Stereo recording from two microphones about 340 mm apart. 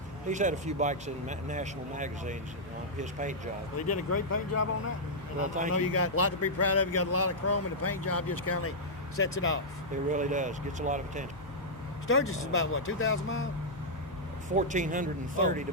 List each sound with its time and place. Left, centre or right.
0.3 s speech: right
3.8 s speech: left
5.6 s speech: right
5.9 s speech: left
10.1 s speech: right
12.0 s speech: left
14.5 s speech: right